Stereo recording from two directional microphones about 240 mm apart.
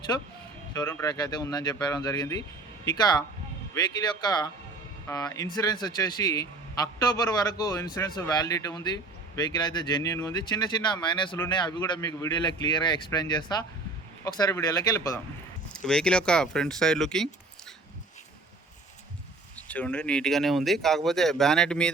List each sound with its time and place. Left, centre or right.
0.7 s a man's voice: centre
5.0 s a man's voice: centre
19.5 s speech: centre